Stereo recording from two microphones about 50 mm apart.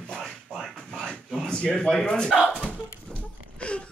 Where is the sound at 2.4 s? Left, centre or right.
Left.